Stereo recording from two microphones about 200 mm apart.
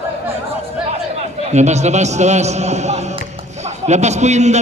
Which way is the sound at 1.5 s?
35° right (ahead or behind).